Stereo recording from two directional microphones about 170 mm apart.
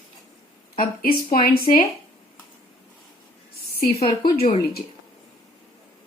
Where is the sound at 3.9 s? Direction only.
30° left (ahead or behind).